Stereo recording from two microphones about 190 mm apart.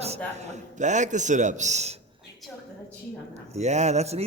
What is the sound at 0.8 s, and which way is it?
A man's voice, 40° right (ahead or behind).